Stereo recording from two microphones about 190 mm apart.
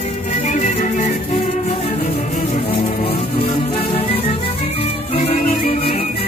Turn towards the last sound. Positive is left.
turn(degrees=35)  # may be behind; listen again after turning